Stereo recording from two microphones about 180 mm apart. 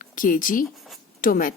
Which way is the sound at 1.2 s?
50° left (ahead or behind).